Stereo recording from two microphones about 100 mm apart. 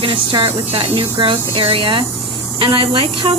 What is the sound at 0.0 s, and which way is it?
Speech, 60° right (ahead or behind).